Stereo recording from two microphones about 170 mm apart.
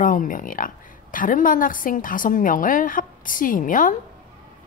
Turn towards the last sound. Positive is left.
turn(degrees=50)  # may be behind; listen again after turning